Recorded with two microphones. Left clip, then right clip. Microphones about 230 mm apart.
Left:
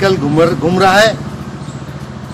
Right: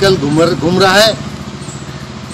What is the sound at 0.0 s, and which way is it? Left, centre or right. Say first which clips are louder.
A man's voice: right 1 dB; centre.